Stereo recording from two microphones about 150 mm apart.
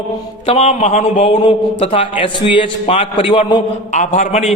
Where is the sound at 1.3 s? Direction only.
40° left (ahead or behind).